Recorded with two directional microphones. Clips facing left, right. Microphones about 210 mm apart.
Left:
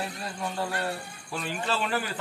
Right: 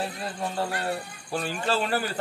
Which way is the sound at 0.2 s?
30° right (ahead or behind).